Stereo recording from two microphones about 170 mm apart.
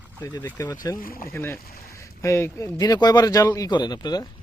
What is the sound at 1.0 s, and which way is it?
Speech, 55° left (ahead or behind).